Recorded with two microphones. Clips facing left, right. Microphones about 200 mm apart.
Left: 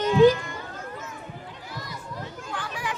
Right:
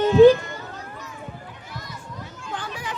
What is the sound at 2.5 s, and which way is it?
Children playing, 25° right (ahead or behind).